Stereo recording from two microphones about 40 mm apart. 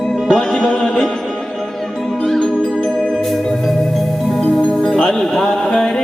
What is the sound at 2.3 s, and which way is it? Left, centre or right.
Music, centre.